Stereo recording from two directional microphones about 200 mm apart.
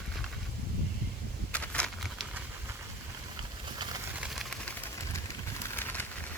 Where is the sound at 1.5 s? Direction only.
5° left (ahead or behind).